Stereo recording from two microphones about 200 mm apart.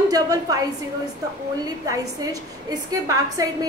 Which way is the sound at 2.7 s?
20° right (ahead or behind).